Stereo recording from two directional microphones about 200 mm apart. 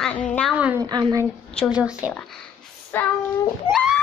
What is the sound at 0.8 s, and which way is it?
Speech, 20° right (ahead or behind).